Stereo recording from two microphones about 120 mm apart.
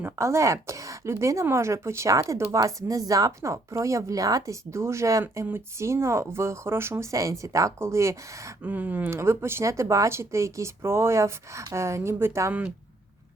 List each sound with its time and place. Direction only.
0.0 s speech: 25° right (ahead or behind)
8.6 s speech: 15° right (ahead or behind)